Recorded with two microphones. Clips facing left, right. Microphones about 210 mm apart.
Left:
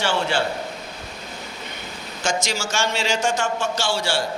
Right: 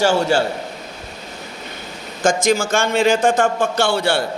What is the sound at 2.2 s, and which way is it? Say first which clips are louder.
A man's voice: right 9 dB; 50° right (ahead or behind).